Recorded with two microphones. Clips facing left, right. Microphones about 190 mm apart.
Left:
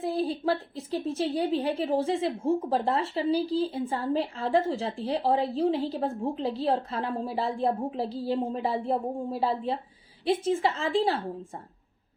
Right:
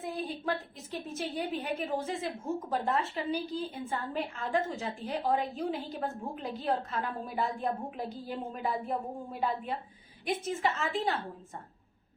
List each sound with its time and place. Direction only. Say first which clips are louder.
0.0 s a woman's voice: left 7 dB; 30° left (ahead or behind)